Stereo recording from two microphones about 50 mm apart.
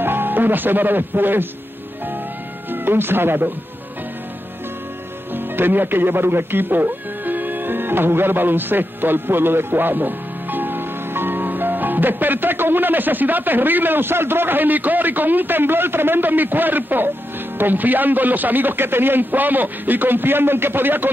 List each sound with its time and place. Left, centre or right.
0.0 s speech: right
2.7 s speech: right
5.3 s a man's voice: right